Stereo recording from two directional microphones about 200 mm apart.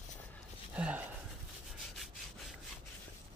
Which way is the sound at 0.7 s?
5° right (ahead or behind).